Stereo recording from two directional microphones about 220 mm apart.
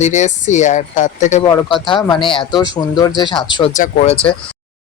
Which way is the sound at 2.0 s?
20° left (ahead or behind).